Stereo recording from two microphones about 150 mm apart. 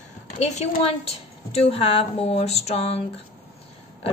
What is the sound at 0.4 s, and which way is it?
A woman's voice, 45° left (ahead or behind).